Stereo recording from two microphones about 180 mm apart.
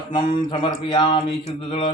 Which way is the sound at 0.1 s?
30° left (ahead or behind).